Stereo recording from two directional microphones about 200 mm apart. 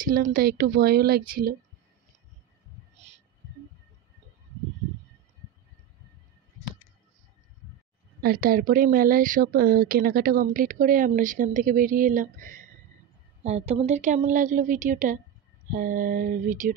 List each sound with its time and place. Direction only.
0.3 s speech: 50° right (ahead or behind)
8.2 s a woman's voice: 50° right (ahead or behind)